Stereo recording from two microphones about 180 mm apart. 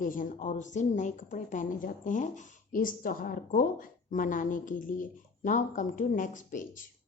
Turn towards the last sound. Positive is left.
turn(degrees=50)  # may be behind; listen again after turning